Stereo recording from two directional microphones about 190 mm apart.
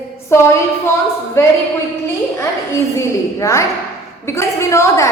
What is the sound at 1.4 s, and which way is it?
Speech, 15° left (ahead or behind).